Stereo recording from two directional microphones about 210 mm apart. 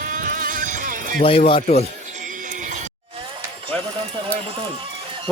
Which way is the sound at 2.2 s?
35° right (ahead or behind).